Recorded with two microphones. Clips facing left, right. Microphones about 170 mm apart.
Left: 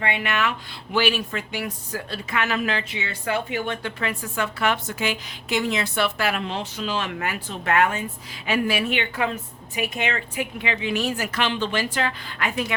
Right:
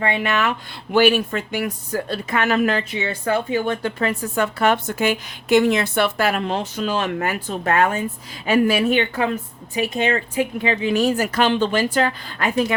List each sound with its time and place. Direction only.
0.0 s a woman's voice: 40° right (ahead or behind)